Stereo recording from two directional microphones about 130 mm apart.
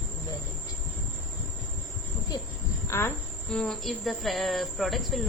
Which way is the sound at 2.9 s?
20° left (ahead or behind).